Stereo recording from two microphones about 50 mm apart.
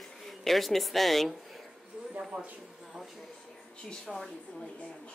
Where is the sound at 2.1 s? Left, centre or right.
Right.